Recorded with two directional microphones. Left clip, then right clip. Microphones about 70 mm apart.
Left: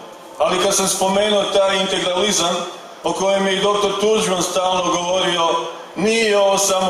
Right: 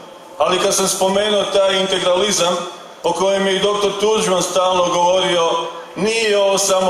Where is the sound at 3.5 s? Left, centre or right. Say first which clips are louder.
Even; right.